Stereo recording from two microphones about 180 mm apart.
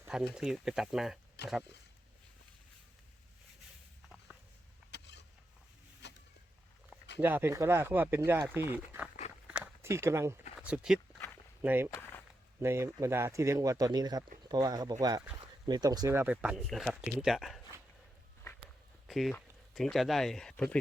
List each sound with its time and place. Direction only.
0.3 s speech: 5° right (ahead or behind)
4.9 s vehicle: 70° left (ahead or behind)
7.2 s speech: 10° right (ahead or behind)
9.5 s walk: 10° right (ahead or behind)
10.6 s speech: 5° right (ahead or behind)
19.0 s a sound: centre (ahead or behind)
19.7 s speech: centre (ahead or behind)